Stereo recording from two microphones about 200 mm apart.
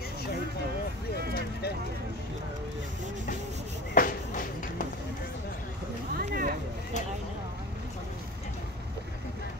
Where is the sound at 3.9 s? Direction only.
45° left (ahead or behind).